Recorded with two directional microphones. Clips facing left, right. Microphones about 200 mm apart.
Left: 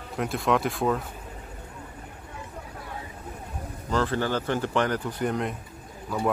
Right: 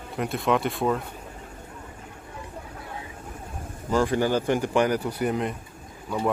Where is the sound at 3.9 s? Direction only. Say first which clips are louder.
Right 3 dB; 15° right (ahead or behind).